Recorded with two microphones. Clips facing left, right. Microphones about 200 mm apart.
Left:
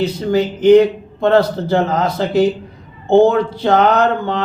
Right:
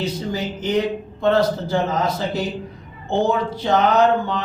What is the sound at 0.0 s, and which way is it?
A man's voice, 65° left (ahead or behind).